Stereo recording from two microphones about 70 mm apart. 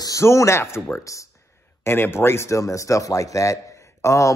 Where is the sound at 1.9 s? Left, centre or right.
Left.